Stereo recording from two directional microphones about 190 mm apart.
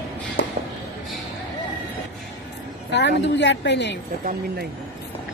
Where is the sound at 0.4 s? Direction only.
70° left (ahead or behind).